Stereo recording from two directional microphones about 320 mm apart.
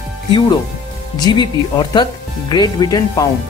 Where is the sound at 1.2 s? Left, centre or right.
Centre.